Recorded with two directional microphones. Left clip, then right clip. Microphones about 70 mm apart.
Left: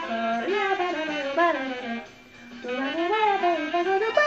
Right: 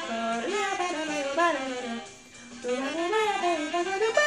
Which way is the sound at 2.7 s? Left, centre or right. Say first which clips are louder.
Left 2 dB; right.